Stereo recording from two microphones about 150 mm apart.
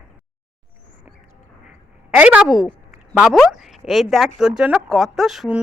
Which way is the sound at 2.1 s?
10° right (ahead or behind).